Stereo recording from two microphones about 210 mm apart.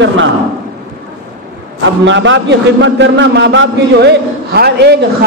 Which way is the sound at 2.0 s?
60° right (ahead or behind).